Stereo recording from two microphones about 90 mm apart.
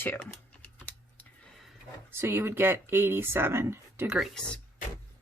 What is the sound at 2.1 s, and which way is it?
Speech, 25° right (ahead or behind).